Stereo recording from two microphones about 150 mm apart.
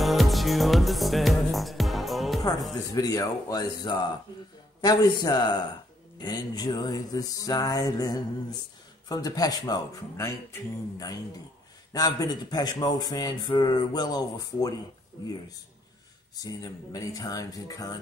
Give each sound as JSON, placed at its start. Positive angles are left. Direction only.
{"t": 0.0, "sound": "music", "side_deg": 0}
{"t": 2.8, "sound": "speech", "side_deg": 25}
{"t": 16.3, "sound": "speech", "side_deg": 25}